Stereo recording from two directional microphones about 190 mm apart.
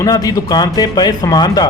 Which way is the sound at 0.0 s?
20° left (ahead or behind).